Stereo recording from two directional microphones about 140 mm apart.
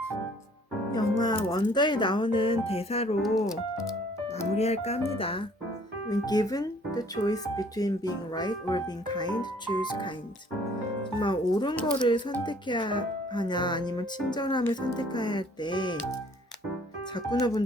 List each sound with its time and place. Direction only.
0.9 s speech: 30° left (ahead or behind); by 3.2 s 45° left (ahead or behind)
4.5 s speech: 50° left (ahead or behind)
6.1 s speech: 30° left (ahead or behind)
11.2 s speech: 35° left (ahead or behind)
17.2 s speech: 30° left (ahead or behind)